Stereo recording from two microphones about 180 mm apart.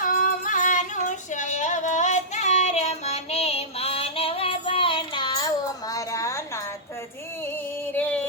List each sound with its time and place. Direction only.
0.0 s female singing: 50° left (ahead or behind); by 6.7 s 15° left (ahead or behind)
7.9 s music: 10° left (ahead or behind)